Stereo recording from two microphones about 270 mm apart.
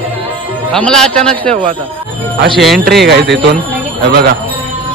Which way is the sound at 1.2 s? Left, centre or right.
Right.